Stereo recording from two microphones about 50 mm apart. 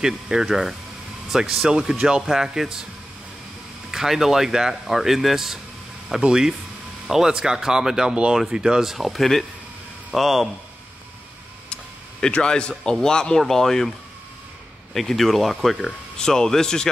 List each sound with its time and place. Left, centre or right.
0.0 s speech: centre
3.9 s speech: centre
11.7 s a sound: centre
13.0 s speech: centre
15.0 s speech: centre